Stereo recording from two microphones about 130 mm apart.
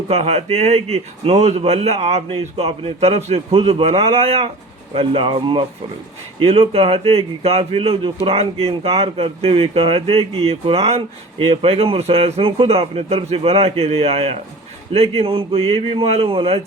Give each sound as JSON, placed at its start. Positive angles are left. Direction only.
{"t": 0.1, "sound": "speech", "side_deg": -55}